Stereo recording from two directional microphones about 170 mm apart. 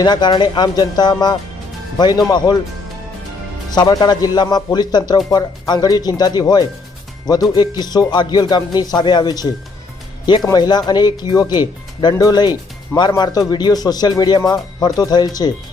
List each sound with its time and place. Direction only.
0.0 s speech: 25° left (ahead or behind)
3.8 s speech: 25° left (ahead or behind)
10.5 s speech: 25° left (ahead or behind)